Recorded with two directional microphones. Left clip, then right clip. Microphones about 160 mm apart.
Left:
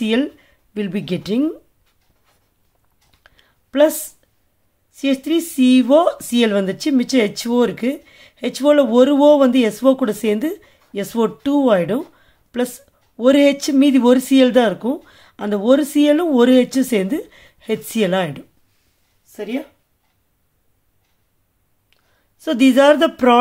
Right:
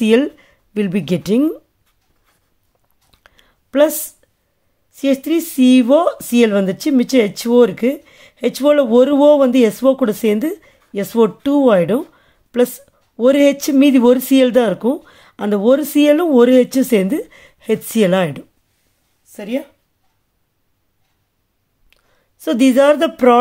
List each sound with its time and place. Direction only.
0.0 s speech: 35° right (ahead or behind)
3.1 s a sound: 30° right (ahead or behind)
4.9 s speech: 30° right (ahead or behind)
21.8 s speech: 30° right (ahead or behind)